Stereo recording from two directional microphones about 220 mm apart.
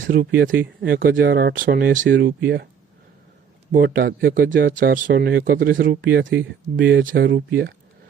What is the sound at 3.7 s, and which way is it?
Speech, 40° right (ahead or behind).